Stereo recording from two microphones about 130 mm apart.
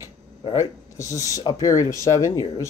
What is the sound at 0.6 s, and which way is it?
Speech, 25° left (ahead or behind).